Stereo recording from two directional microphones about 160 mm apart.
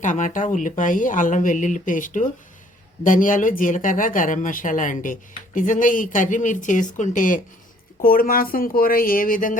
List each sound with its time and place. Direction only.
0.0 s speech: 50° left (ahead or behind)